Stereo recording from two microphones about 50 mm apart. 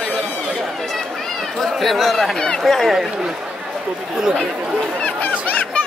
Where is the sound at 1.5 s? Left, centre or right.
Centre.